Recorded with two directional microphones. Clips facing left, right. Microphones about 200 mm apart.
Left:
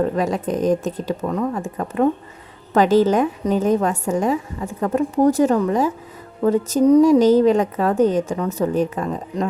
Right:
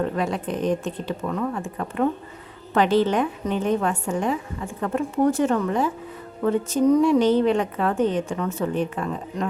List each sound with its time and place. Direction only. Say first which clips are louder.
0.0 s a woman's voice: left 5 dB; 40° left (ahead or behind)
2.7 s a woman's voice: left 4 dB; 40° left (ahead or behind)